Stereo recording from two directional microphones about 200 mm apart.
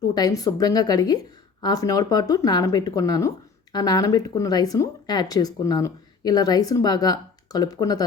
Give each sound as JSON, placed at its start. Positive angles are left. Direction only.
{"t": 0.1, "sound": "speech", "side_deg": 20}